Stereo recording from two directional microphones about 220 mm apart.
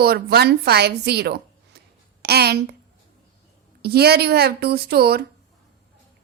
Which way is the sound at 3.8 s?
45° right (ahead or behind).